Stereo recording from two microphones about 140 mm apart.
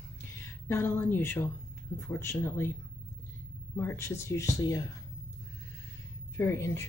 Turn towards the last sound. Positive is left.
turn(degrees=20)  # may be behind; listen again after turning